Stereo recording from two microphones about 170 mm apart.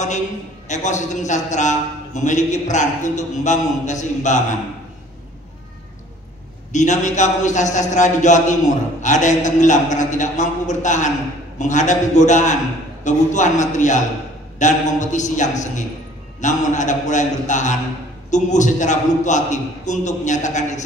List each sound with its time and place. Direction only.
0.7 s a man's voice: 45° left (ahead or behind)
6.7 s a man's voice: 45° left (ahead or behind)